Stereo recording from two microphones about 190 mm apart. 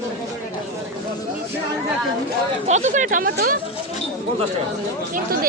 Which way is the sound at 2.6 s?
40° right (ahead or behind).